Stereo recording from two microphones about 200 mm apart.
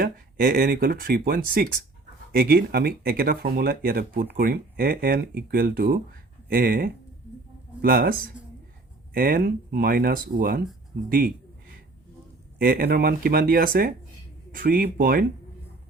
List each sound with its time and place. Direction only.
0.0 s speech: 45° right (ahead or behind)
12.5 s speech: 45° right (ahead or behind)